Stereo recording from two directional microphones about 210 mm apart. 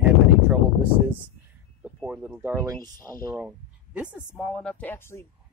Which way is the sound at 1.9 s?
5° right (ahead or behind).